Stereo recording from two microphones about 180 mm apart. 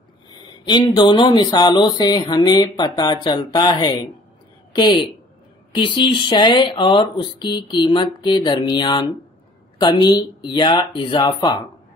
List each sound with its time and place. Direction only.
0.3 s speech: 25° left (ahead or behind)